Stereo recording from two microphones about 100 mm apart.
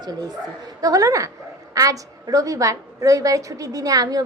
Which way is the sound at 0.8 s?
35° right (ahead or behind).